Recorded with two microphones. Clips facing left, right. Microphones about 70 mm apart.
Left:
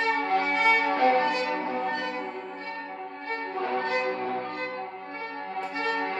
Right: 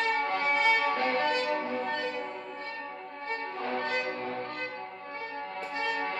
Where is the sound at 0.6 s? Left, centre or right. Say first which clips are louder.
Left 6 dB; left.